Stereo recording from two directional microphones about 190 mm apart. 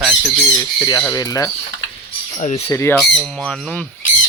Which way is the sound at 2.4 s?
35° left (ahead or behind).